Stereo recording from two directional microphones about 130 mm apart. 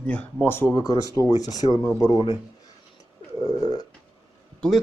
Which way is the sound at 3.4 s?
30° left (ahead or behind).